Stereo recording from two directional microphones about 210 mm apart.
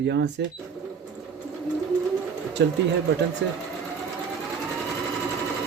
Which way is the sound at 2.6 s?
55° right (ahead or behind).